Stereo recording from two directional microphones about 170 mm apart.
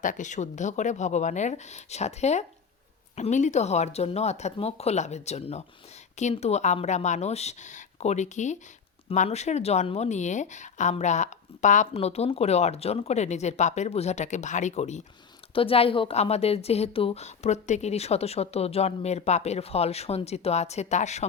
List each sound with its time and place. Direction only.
0.0 s speech: 45° left (ahead or behind)